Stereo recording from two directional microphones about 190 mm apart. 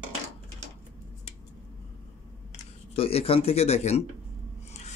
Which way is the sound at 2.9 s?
30° left (ahead or behind).